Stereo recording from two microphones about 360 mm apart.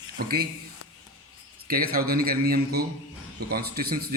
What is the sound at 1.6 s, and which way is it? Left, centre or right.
Speech, right.